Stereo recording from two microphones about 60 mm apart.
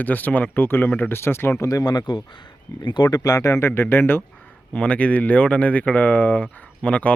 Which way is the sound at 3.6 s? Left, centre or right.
Left.